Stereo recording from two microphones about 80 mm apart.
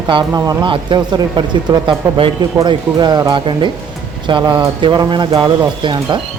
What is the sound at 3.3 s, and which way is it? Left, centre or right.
A man's voice, right.